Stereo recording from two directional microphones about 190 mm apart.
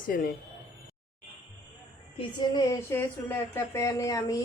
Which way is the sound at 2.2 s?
25° left (ahead or behind).